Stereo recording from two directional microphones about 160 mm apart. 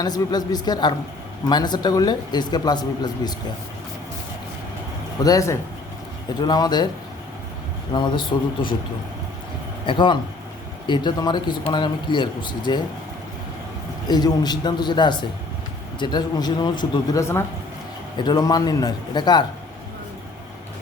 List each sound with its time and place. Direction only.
0.0 s a man's voice: 25° left (ahead or behind)
5.2 s a man's voice: 20° left (ahead or behind)
7.9 s speech: 30° left (ahead or behind)
9.8 s a man's voice: 30° left (ahead or behind)
14.1 s a man's voice: 25° left (ahead or behind)